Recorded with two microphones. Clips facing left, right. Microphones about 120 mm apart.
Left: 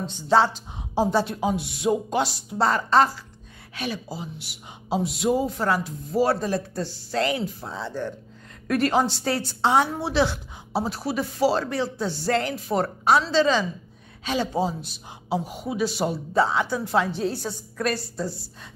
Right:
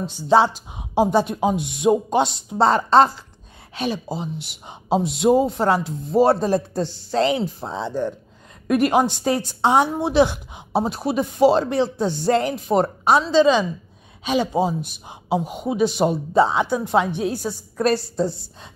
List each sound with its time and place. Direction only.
0.0 s a woman's voice: 10° right (ahead or behind)
17.7 s a woman's voice: 25° right (ahead or behind)